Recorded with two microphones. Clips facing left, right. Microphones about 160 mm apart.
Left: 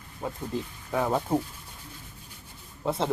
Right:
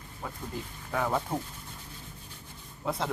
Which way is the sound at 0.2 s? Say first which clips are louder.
Left 6 dB; 25° left (ahead or behind).